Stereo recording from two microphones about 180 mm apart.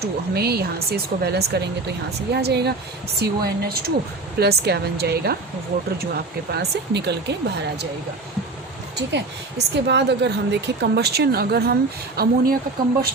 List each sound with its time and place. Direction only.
0.0 s a woman's voice: 60° right (ahead or behind)
9.0 s a woman's voice: 70° right (ahead or behind)